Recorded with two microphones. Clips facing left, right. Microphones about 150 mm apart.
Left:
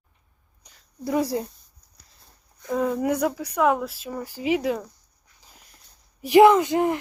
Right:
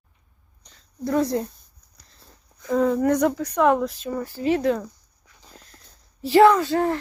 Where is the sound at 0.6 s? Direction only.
10° left (ahead or behind).